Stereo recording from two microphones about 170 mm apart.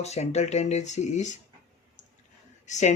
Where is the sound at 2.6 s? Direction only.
45° left (ahead or behind).